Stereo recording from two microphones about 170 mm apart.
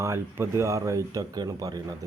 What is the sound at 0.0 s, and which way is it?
Speech, 15° right (ahead or behind).